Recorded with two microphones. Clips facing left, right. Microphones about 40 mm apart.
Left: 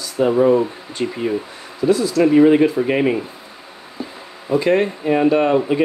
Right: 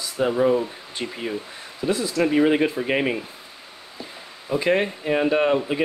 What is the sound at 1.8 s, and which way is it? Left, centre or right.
Speech, right.